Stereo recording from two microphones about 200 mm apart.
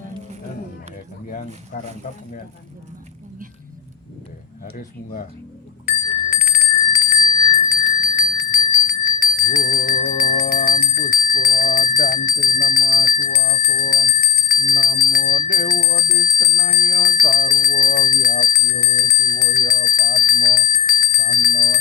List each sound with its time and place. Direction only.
1.3 s speech: 45° left (ahead or behind)
6.3 s bicycle bell: 45° left (ahead or behind)
7.5 s bell: 45° left (ahead or behind)